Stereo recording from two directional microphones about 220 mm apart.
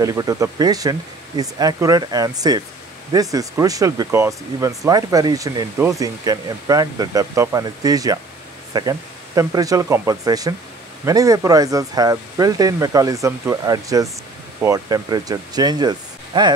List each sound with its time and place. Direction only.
0.0 s speech: 15° right (ahead or behind)